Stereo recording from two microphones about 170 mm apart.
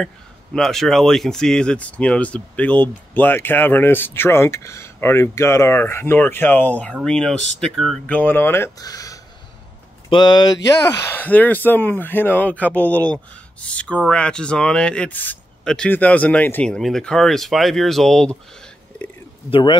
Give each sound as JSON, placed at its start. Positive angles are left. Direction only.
{"t": 0.6, "sound": "speech", "side_deg": 0}
{"t": 19.5, "sound": "speech", "side_deg": 30}